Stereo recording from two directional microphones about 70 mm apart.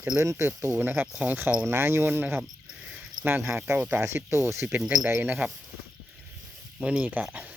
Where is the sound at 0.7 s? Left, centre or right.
Right.